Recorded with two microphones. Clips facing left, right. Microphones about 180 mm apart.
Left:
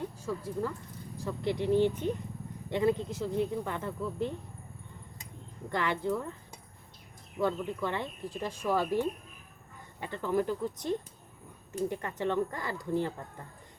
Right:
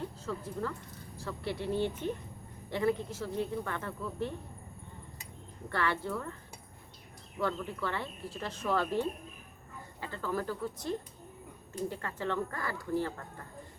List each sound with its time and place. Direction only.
0.0 s a sound: 15° left (ahead or behind)
1.2 s speech: 15° left (ahead or behind)
5.6 s speech: 15° left (ahead or behind)
7.3 s speech: 15° left (ahead or behind)
10.0 s speech: 20° left (ahead or behind)